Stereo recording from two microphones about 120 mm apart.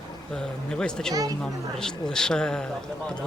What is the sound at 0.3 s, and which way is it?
A man's voice, 5° left (ahead or behind).